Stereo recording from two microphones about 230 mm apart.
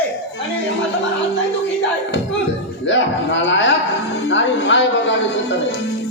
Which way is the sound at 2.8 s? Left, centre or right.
Left.